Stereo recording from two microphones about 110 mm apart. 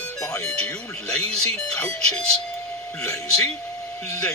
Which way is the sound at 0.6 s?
10° left (ahead or behind).